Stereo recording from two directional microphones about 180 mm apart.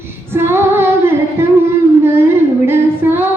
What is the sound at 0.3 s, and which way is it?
Female singing, 15° right (ahead or behind).